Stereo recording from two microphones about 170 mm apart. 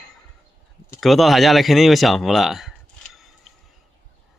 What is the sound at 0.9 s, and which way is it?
Speech, centre (ahead or behind).